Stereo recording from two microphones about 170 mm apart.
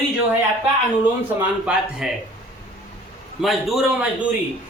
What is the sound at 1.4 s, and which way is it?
Speech, 5° right (ahead or behind).